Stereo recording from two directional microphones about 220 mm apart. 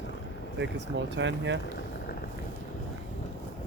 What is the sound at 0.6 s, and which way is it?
Speech, 55° right (ahead or behind).